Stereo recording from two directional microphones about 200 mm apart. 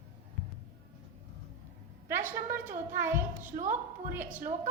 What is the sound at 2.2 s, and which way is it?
Speech, 40° right (ahead or behind).